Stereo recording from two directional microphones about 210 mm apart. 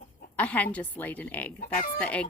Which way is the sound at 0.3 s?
5° left (ahead or behind).